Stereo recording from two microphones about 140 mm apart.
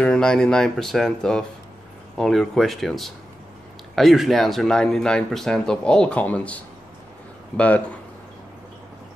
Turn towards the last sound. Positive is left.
turn(degrees=10)  # may be behind; listen again after turning